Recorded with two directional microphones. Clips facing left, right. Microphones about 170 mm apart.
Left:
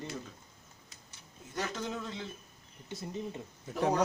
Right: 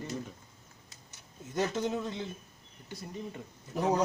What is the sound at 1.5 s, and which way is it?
Speech, 25° right (ahead or behind).